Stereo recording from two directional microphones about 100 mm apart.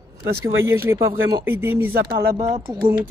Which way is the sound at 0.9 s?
30° right (ahead or behind).